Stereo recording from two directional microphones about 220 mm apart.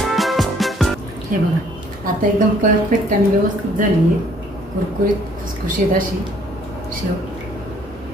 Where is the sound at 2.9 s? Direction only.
35° right (ahead or behind).